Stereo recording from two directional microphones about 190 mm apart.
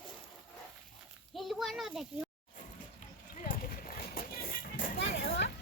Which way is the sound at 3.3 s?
50° left (ahead or behind).